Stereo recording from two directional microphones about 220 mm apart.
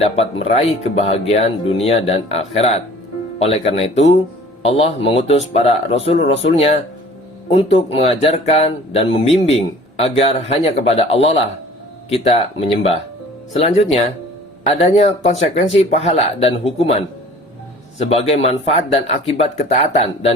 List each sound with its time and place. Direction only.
0.0 s speech: 30° left (ahead or behind)
7.5 s speech: 30° left (ahead or behind)
18.0 s speech: 30° left (ahead or behind)